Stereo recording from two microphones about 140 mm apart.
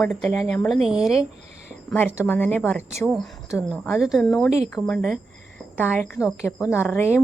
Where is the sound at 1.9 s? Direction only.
15° left (ahead or behind).